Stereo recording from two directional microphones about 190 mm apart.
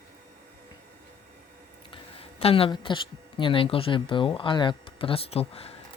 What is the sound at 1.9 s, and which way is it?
Speech, 30° left (ahead or behind).